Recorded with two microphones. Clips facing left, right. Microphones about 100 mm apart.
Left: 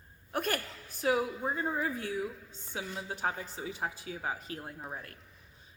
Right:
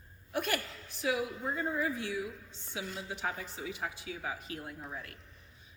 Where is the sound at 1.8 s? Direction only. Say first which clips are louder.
Left 1 dB; 40° left (ahead or behind).